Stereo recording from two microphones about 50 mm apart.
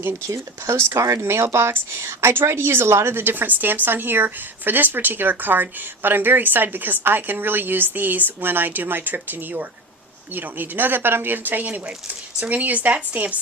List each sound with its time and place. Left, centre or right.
0.3 s speech: right
1.2 s a woman's voice: right